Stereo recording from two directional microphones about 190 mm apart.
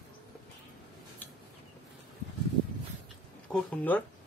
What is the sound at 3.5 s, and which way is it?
Speech, 10° left (ahead or behind).